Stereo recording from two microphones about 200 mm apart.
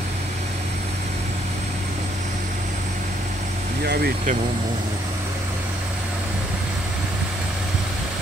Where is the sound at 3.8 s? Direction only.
55° right (ahead or behind).